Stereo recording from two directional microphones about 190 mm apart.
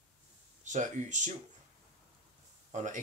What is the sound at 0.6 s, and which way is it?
Speech, 40° right (ahead or behind).